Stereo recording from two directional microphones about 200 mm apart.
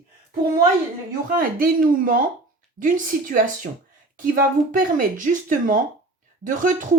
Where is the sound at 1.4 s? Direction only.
45° right (ahead or behind).